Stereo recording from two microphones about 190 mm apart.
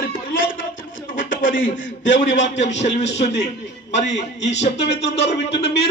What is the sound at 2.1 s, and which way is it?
A man's voice, 40° left (ahead or behind).